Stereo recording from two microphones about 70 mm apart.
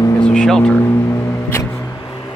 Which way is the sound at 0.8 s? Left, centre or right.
Left.